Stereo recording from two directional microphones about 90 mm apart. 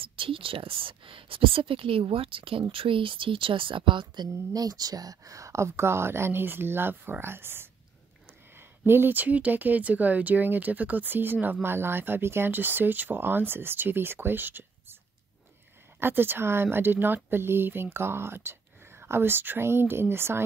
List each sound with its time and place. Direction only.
0.0 s speech: 80° right; by 4.3 s 60° right (ahead or behind)
4.6 s speech: 45° right (ahead or behind); by 15.0 s 25° right (ahead or behind)
16.0 s speech: 25° right (ahead or behind)